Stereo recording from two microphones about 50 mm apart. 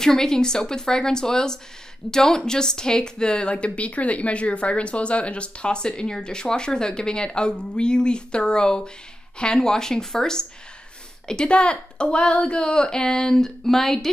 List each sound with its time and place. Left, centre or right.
0.0 s a woman's voice: centre